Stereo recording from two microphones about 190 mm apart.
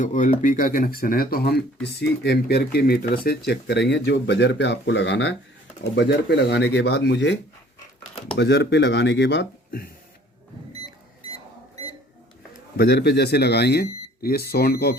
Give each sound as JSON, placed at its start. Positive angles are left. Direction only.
{"t": 0.0, "sound": "speech", "side_deg": 40}
{"t": 8.4, "sound": "speech", "side_deg": 65}
{"t": 12.7, "sound": "speech", "side_deg": 55}